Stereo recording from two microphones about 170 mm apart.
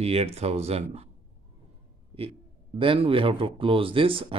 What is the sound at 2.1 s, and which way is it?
A man's voice, 35° right (ahead or behind).